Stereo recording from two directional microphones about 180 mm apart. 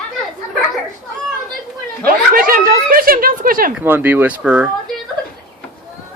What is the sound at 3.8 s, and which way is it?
Speech, 10° right (ahead or behind).